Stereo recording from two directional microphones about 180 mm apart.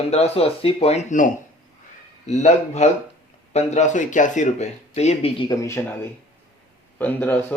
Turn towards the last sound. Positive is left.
turn(degrees=10)  # may be behind; listen again after turning